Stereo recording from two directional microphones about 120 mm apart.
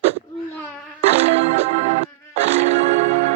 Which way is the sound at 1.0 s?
60° right (ahead or behind).